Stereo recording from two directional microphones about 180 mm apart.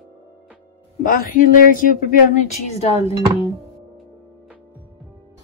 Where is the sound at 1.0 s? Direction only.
50° left (ahead or behind).